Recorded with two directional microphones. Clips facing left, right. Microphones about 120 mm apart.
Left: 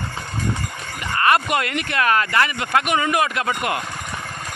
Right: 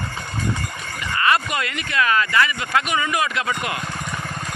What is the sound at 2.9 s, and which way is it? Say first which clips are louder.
Speech: left 3 dB; 50° left (ahead or behind).